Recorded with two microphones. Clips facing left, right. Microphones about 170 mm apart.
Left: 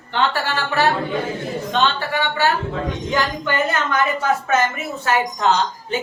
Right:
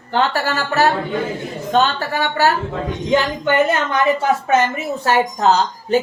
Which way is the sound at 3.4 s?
25° right (ahead or behind).